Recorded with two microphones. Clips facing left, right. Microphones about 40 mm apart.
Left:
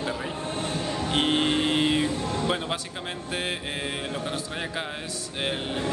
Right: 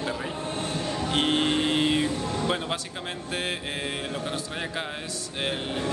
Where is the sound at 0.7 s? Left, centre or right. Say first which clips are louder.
Even; centre.